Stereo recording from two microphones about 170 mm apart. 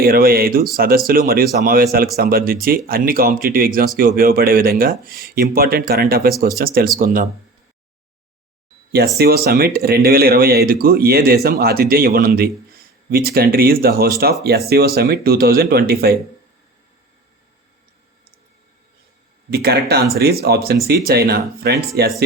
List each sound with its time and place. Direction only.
0.0 s speech: 60° right (ahead or behind)
9.1 s speech: 65° right (ahead or behind)
19.5 s speech: 70° right (ahead or behind)